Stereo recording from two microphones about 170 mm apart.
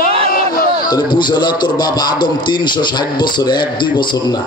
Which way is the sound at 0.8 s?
25° left (ahead or behind).